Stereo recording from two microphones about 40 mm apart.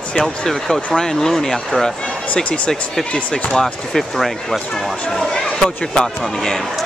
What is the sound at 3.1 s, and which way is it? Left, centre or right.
Speech, left.